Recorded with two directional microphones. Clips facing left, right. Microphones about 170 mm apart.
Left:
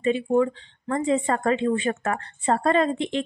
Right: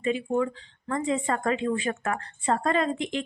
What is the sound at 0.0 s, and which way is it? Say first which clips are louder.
Speech: left 5 dB; 30° left (ahead or behind).